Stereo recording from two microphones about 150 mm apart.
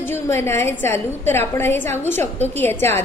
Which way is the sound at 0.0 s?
15° left (ahead or behind).